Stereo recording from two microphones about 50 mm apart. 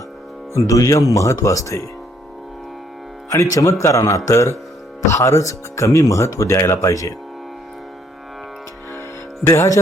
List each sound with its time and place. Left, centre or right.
0.5 s speech: left
3.3 s speech: left
9.0 s music: left